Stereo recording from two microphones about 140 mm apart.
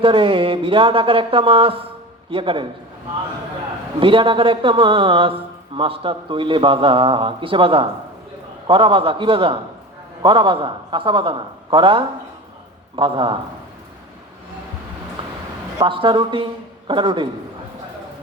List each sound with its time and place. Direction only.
0.0 s speech: 40° right (ahead or behind)
4.0 s speech: 35° right (ahead or behind)
15.8 s speech: 35° right (ahead or behind)